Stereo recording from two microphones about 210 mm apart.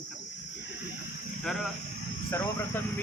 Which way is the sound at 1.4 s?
Centre (ahead or behind).